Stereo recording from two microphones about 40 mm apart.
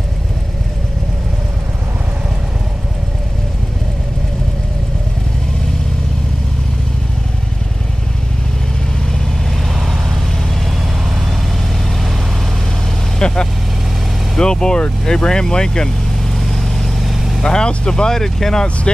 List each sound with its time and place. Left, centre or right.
13.2 s vehicle: centre
15.0 s speech: centre
16.3 s vehicle: centre
17.4 s speech: centre